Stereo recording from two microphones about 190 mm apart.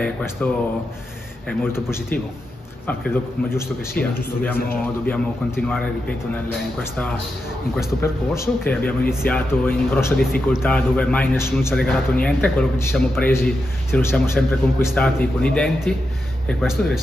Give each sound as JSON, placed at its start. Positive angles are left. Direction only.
{"t": 0.0, "sound": "a man's voice", "side_deg": 5}
{"t": 1.6, "sound": "a man's voice", "side_deg": 10}
{"t": 5.0, "sound": "a man's voice", "side_deg": 5}
{"t": 8.0, "sound": "a man's voice", "side_deg": 10}